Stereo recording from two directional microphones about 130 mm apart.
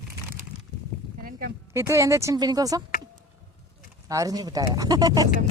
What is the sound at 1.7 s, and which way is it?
Speech, 20° right (ahead or behind).